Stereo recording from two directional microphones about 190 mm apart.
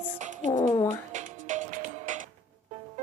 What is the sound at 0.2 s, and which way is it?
Music, 40° right (ahead or behind).